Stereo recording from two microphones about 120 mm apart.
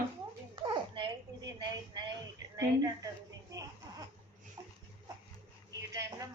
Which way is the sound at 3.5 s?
30° right (ahead or behind).